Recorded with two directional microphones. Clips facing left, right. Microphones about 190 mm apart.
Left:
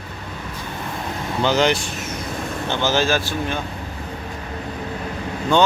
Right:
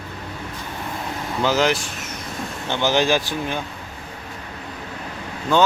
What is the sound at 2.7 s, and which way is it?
Speech, 15° right (ahead or behind).